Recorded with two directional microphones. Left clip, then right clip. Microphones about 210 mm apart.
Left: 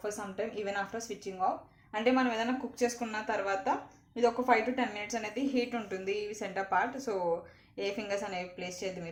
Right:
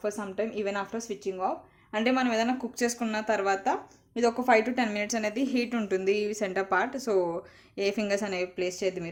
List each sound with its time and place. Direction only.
0.0 s speech: 45° right (ahead or behind)